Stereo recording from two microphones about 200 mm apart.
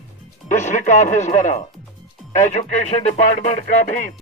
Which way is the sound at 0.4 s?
35° left (ahead or behind).